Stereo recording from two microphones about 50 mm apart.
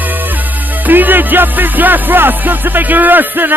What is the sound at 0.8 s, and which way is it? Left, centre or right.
Music, right.